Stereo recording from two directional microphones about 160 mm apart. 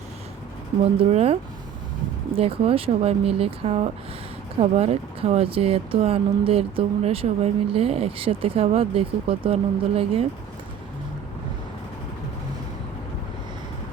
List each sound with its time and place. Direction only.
1.1 s speech: 40° right (ahead or behind)